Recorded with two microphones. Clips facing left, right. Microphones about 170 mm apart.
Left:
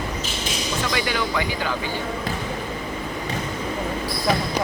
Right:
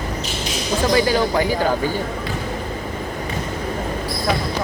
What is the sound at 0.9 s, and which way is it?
Speech, 35° right (ahead or behind).